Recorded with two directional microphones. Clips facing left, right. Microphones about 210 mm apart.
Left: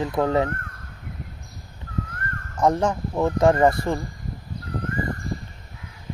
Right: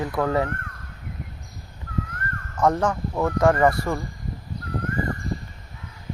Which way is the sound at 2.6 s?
15° left (ahead or behind).